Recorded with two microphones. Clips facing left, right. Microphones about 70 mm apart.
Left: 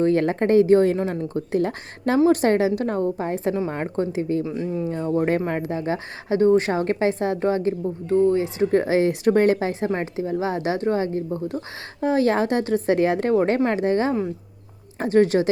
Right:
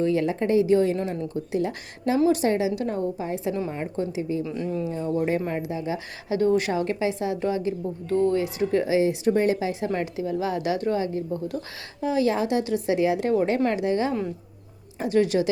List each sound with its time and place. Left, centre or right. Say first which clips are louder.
0.0 s a woman's voice: left 4 dB; left
4.4 s speech: left 2 dB; left
4.9 s a woman's voice: left 4 dB; left
8.1 s speech: left 3 dB; left
8.7 s a woman's voice: left 2 dB; left
9.9 s speech: left 2 dB; left
11.9 s a woman's voice: left 3 dB; left